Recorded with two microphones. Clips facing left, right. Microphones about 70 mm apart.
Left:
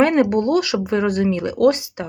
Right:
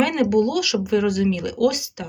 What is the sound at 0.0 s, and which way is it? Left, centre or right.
Speech, left.